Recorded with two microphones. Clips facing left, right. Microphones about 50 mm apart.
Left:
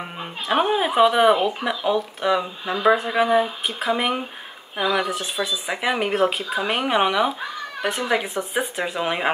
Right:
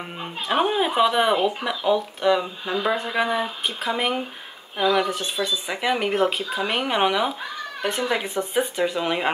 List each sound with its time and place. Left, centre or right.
0.0 s speech: centre
8.5 s speech: centre